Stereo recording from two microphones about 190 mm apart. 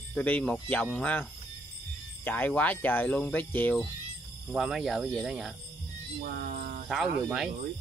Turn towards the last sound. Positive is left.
turn(degrees=0)  # may be behind; listen again after turning